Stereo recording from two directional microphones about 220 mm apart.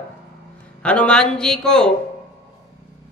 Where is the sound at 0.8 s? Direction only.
5° left (ahead or behind).